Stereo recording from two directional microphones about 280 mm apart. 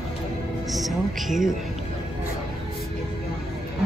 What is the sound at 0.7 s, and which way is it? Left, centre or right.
Speech, centre.